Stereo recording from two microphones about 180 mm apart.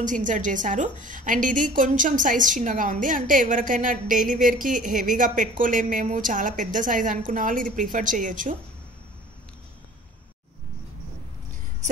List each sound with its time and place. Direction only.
0.0 s a woman's voice: 45° right (ahead or behind)